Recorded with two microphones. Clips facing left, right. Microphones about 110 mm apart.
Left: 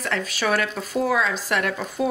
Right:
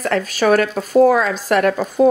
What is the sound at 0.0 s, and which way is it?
Speech, 45° right (ahead or behind).